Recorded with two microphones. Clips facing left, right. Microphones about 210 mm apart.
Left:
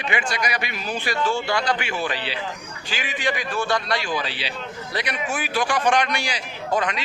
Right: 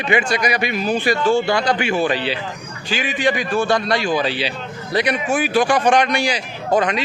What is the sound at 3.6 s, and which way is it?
Speech, 50° right (ahead or behind).